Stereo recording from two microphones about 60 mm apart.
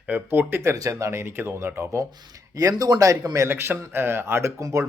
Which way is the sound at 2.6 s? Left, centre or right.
Right.